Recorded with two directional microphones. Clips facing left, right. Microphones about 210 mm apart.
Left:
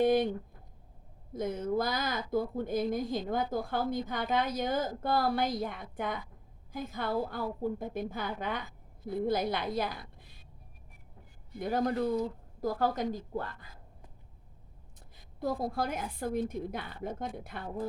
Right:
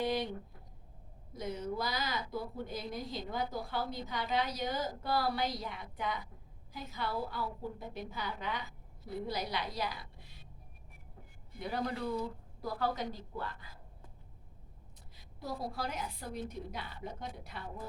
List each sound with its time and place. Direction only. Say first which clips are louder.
0.0 s speech: left 8 dB; 50° left (ahead or behind)
1.3 s speech: left 6 dB; 50° left (ahead or behind)
11.6 s speech: left 7 dB; 45° left (ahead or behind)
15.1 s speech: left 8 dB; 50° left (ahead or behind)